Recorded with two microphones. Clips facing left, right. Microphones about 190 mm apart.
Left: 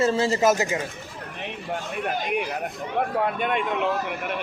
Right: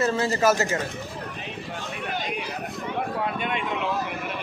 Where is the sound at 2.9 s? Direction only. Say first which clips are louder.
Left 5 dB; 50° left (ahead or behind).